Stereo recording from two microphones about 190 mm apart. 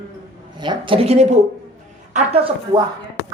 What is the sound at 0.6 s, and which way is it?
Speech, 25° right (ahead or behind).